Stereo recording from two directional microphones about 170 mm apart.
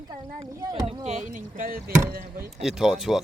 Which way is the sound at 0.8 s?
40° right (ahead or behind).